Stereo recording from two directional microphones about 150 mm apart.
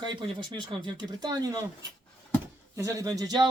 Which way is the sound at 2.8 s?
20° right (ahead or behind).